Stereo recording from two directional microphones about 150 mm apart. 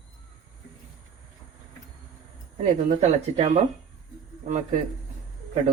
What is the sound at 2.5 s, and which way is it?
Speech, 50° right (ahead or behind).